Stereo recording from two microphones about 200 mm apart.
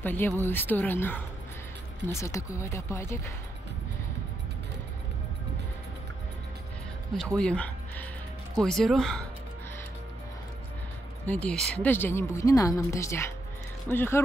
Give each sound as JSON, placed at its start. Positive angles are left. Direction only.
{"t": 0.0, "sound": "speech", "side_deg": 10}
{"t": 7.3, "sound": "speech", "side_deg": 5}
{"t": 11.2, "sound": "speech", "side_deg": 5}